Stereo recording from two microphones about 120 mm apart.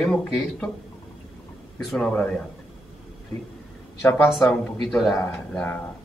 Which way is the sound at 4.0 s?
15° left (ahead or behind).